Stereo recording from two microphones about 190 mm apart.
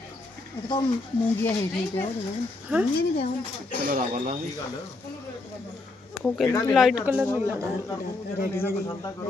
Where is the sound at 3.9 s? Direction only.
45° right (ahead or behind).